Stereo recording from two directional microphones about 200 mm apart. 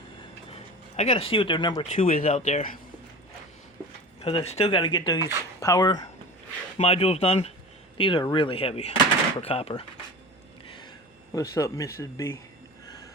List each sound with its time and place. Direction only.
0.9 s speech: 35° left (ahead or behind)
4.2 s speech: 30° left (ahead or behind)
6.7 s speech: 30° left (ahead or behind)
11.3 s speech: 15° left (ahead or behind)